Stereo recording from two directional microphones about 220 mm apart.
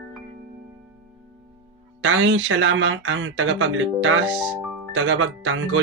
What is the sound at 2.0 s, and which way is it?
Speech, 60° right (ahead or behind).